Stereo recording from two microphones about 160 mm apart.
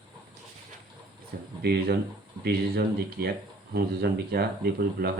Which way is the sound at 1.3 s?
80° right.